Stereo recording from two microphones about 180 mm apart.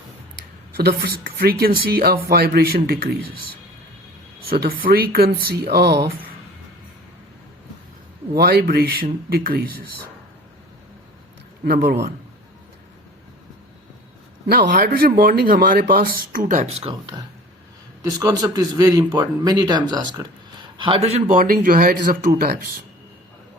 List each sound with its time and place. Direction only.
0.8 s speech: 60° right (ahead or behind)
8.4 s speech: 60° right (ahead or behind)
11.6 s speech: 60° right (ahead or behind)
14.4 s speech: 55° right (ahead or behind); by 16.9 s 35° right (ahead or behind)
16.9 s speech: 25° right (ahead or behind); by 22.7 s 55° right (ahead or behind)